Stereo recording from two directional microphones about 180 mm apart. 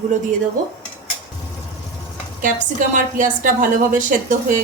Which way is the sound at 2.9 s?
45° right (ahead or behind).